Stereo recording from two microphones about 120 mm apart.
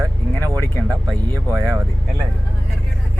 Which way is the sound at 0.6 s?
20° left (ahead or behind).